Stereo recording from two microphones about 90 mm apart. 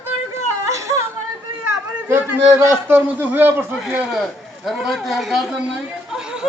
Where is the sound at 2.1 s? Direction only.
25° right (ahead or behind).